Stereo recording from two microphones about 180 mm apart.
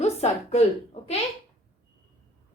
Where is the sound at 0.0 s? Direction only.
35° left (ahead or behind).